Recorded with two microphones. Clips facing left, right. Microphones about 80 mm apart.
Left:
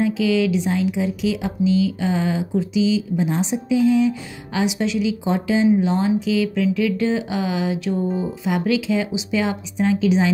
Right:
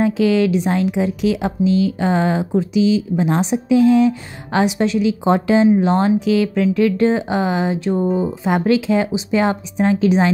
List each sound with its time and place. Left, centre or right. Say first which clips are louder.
0.0 s speech: right 3 dB; right